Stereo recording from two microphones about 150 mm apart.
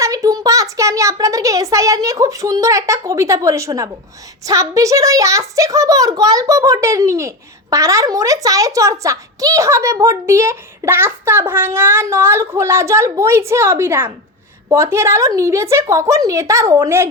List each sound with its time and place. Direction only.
0.0 s a child's voice: 20° right (ahead or behind)